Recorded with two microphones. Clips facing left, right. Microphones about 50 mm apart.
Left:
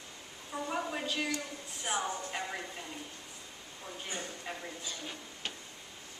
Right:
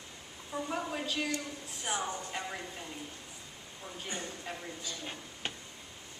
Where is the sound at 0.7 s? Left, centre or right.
Centre.